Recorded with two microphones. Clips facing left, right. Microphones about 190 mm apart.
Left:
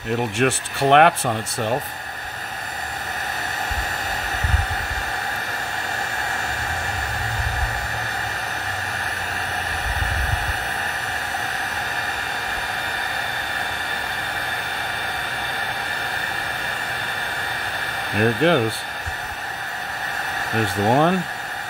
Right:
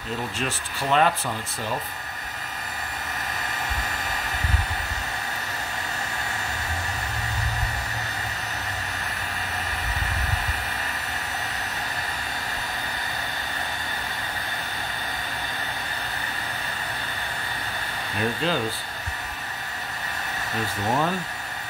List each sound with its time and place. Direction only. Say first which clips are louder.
0.1 s speech: left 9 dB; 70° left (ahead or behind)
1.2 s speech: left 7 dB; 55° left (ahead or behind)
18.1 s speech: left 8 dB; 60° left (ahead or behind)
20.8 s speech: left 7 dB; 60° left (ahead or behind)